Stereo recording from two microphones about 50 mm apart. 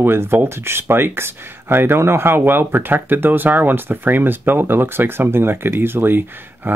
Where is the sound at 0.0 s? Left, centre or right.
Right.